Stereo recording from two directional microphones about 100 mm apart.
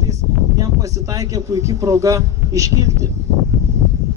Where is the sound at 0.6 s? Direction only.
35° right (ahead or behind).